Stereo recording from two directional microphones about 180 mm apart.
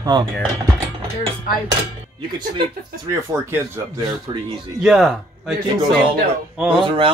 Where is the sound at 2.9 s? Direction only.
55° right (ahead or behind).